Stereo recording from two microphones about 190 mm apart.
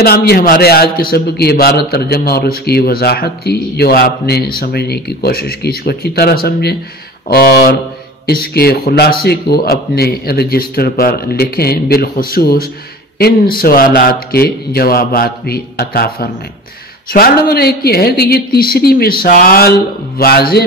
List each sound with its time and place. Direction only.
0.0 s a man's voice: 55° left (ahead or behind)